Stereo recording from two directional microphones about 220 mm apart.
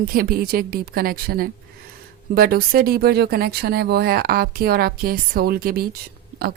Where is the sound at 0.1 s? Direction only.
40° right (ahead or behind).